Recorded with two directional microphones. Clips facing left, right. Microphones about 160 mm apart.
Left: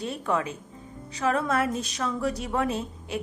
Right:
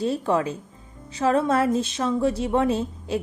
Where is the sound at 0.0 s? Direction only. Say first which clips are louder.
Right 5 dB; 30° right (ahead or behind).